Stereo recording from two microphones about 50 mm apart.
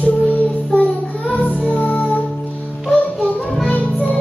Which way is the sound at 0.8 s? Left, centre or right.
Left.